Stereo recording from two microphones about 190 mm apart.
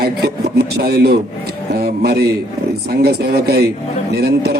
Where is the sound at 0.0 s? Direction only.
55° right (ahead or behind).